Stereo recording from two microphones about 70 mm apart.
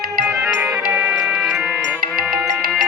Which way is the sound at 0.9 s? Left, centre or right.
Right.